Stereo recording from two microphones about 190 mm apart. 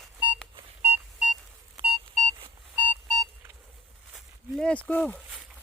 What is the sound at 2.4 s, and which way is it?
Alarm clock, 25° right (ahead or behind).